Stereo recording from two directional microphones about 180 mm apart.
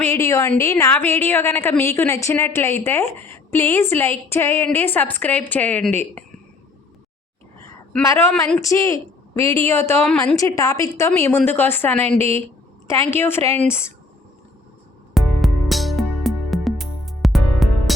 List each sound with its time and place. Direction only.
0.0 s a woman's voice: 15° left (ahead or behind)
8.0 s a woman's voice: 15° left (ahead or behind)
15.1 s music: centre (ahead or behind)